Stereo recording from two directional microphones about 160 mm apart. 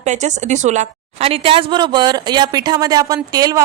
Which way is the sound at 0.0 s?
45° right (ahead or behind).